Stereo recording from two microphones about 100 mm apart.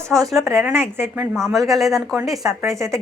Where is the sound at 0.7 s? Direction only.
25° right (ahead or behind).